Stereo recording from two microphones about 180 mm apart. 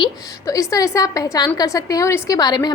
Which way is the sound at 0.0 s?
20° left (ahead or behind).